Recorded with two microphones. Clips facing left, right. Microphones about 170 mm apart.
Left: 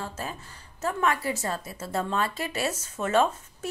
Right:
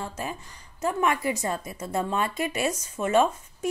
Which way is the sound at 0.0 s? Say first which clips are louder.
Right 2 dB; 10° right (ahead or behind).